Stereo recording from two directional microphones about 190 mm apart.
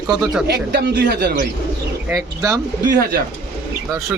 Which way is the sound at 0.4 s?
60° right (ahead or behind).